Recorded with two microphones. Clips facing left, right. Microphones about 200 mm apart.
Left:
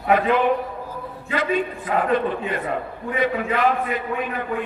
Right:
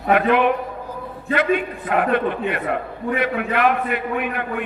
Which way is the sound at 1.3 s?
60° right (ahead or behind).